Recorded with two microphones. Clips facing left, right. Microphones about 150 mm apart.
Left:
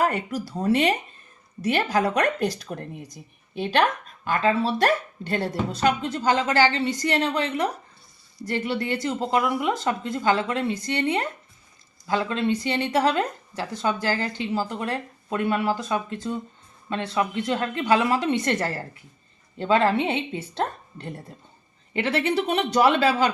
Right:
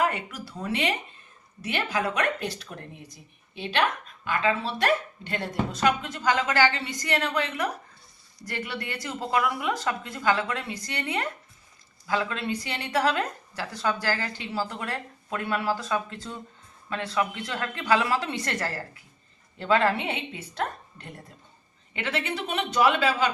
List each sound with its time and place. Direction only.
0.0 s speech: 40° left (ahead or behind)